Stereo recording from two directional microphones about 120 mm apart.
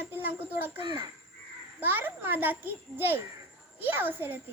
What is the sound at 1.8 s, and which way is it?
Speech, 15° right (ahead or behind).